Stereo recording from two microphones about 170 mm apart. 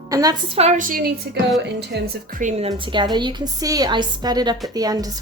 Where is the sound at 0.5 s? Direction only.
40° right (ahead or behind).